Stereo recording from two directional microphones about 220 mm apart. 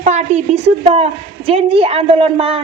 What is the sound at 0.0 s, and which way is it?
A woman's voice, 30° right (ahead or behind).